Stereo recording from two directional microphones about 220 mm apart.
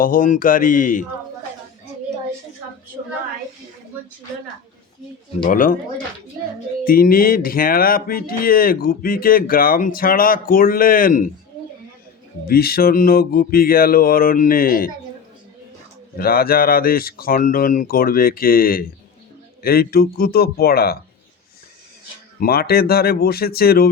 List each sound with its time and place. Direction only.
0.0 s speech: 40° left (ahead or behind)
5.4 s speech: 40° left (ahead or behind)
6.8 s speech: 40° left (ahead or behind)
12.5 s speech: 45° left (ahead or behind)
16.1 s speech: 40° left (ahead or behind)
22.4 s speech: 45° left (ahead or behind)